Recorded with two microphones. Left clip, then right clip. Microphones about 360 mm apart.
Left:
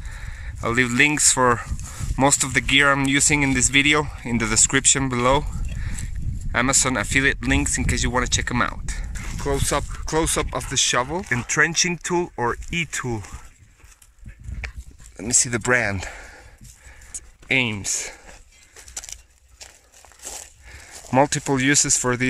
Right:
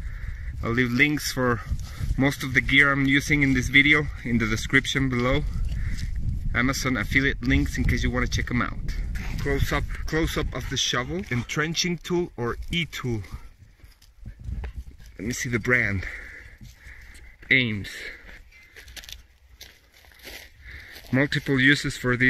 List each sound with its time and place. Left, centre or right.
0.6 s speech: centre
4.0 s speech: left
4.4 s speech: centre
15.2 s speech: centre
15.9 s speech: left
17.8 s speech: left
19.1 s a sound: left
20.2 s a sound: left
21.5 s speech: centre